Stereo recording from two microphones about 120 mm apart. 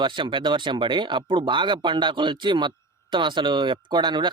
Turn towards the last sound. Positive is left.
turn(degrees=-40)  # may be behind; listen again after turning